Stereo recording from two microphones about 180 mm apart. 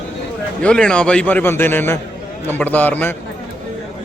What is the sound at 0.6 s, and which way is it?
Speech, 5° left (ahead or behind).